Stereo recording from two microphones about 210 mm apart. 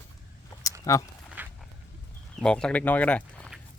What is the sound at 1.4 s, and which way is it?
Walk, 10° right (ahead or behind).